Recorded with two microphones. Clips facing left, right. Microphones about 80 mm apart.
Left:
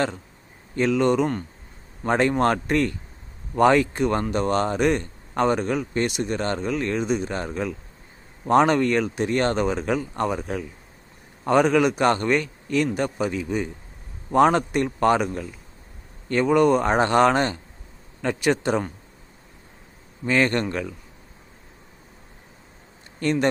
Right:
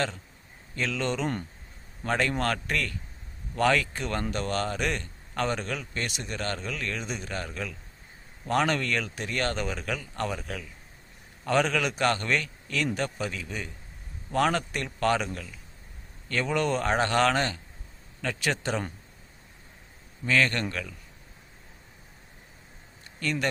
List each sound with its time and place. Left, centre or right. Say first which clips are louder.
0.8 s speech: left 10 dB; centre
20.2 s speech: left 4 dB; left
23.2 s speech: left 7 dB; left